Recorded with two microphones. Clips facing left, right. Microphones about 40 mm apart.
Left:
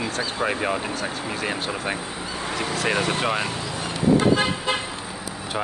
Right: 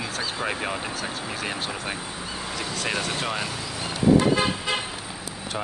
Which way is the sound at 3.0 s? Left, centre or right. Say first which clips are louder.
Left 5 dB; left.